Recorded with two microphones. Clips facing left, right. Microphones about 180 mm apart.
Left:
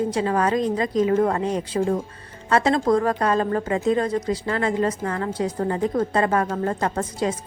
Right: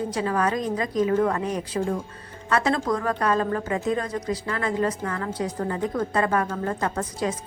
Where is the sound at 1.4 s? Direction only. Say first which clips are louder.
Left 3 dB; 30° left (ahead or behind).